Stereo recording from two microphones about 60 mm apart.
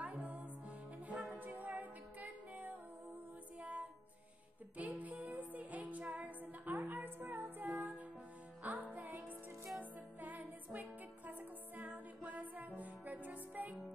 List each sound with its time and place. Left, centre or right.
0.0 s music: right
4.7 s music: right